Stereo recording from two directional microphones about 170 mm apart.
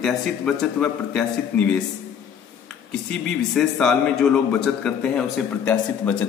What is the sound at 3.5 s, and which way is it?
A man's voice, 5° left (ahead or behind).